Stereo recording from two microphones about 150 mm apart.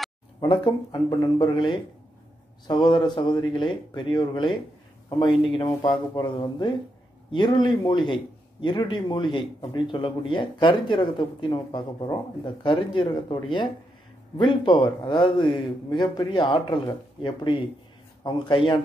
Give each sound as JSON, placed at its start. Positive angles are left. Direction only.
{"t": 0.4, "sound": "speech", "side_deg": 30}
{"t": 5.6, "sound": "speech", "side_deg": 30}